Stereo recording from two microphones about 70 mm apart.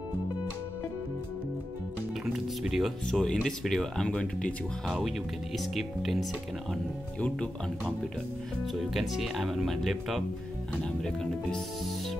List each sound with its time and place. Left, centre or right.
2.3 s music: centre
3.1 s speech: centre
5.6 s speech: centre
7.2 s speech: centre
8.7 s speech: centre